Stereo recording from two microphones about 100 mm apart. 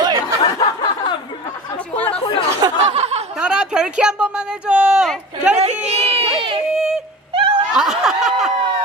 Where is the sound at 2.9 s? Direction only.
90° right.